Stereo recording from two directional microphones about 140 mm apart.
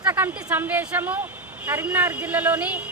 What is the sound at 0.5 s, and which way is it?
A woman's voice, 15° right (ahead or behind).